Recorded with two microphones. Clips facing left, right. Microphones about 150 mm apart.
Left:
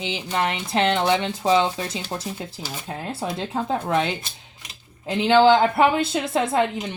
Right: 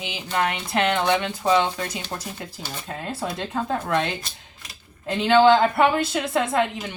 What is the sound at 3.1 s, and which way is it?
A woman's voice, 25° left (ahead or behind).